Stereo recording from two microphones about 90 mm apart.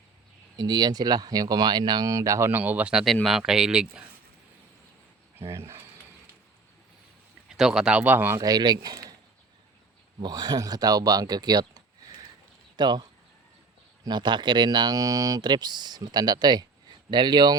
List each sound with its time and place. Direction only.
0.5 s speech: 50° right (ahead or behind)
2.0 s speech: 35° right (ahead or behind)
2.5 s speech: 20° right (ahead or behind)
2.9 s speech: centre (ahead or behind)
5.5 s mechanisms: 30° right (ahead or behind)
7.4 s speech: 5° right (ahead or behind)
8.0 s speech: 20° right (ahead or behind)
8.4 s speech: 50° right (ahead or behind)
10.2 s speech: 50° right (ahead or behind)